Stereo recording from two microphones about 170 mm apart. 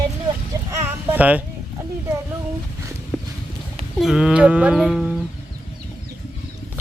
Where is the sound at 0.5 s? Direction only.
20° right (ahead or behind).